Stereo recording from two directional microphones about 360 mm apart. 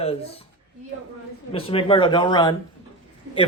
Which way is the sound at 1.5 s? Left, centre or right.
Centre.